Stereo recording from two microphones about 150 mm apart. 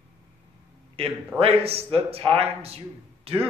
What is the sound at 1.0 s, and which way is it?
A man's voice, 40° right (ahead or behind).